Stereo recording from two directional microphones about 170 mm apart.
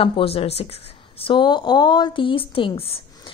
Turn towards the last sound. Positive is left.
turn(degrees=35)  # may be behind; listen again after turning